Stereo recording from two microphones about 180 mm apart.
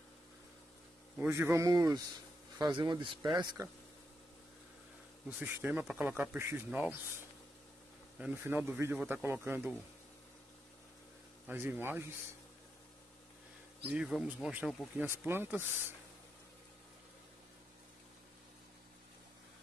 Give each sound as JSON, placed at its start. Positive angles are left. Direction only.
{"t": 1.1, "sound": "speech", "side_deg": -10}
{"t": 5.4, "sound": "speech", "side_deg": -10}
{"t": 8.2, "sound": "speech", "side_deg": -10}
{"t": 11.4, "sound": "speech", "side_deg": -10}
{"t": 13.8, "sound": "speech", "side_deg": -5}